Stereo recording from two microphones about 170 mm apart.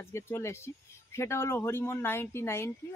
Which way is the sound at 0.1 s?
15° left (ahead or behind).